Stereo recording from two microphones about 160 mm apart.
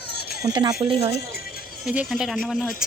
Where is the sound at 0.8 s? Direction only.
40° right (ahead or behind).